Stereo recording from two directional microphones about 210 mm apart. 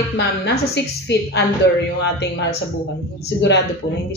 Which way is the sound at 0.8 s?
55° left (ahead or behind).